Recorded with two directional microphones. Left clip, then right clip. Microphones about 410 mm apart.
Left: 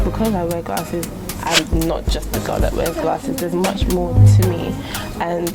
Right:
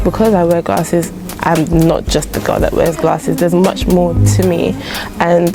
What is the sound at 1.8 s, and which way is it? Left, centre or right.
Speech, right.